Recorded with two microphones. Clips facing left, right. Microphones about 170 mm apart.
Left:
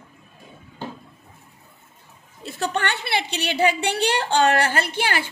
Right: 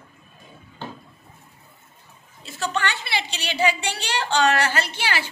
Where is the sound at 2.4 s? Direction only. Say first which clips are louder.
Left 2 dB; 55° left (ahead or behind).